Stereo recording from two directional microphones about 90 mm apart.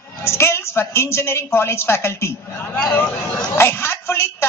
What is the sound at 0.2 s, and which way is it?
A woman's voice, 30° left (ahead or behind).